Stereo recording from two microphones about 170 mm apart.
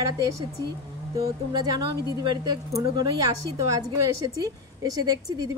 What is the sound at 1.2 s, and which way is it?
A woman's voice, 25° right (ahead or behind).